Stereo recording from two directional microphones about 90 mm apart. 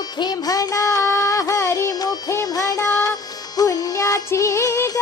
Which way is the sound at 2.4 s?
40° left (ahead or behind).